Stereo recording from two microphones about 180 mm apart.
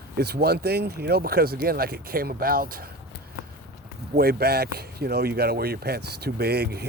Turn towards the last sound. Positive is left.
turn(degrees=-60)  # may be behind; listen again after turning